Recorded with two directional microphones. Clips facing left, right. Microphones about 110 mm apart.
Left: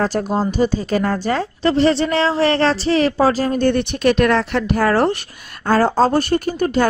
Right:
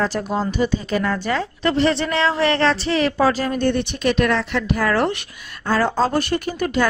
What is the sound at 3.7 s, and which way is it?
A woman's voice, 50° left (ahead or behind).